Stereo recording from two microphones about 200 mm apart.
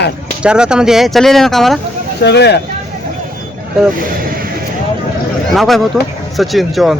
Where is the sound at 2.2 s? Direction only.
55° left (ahead or behind).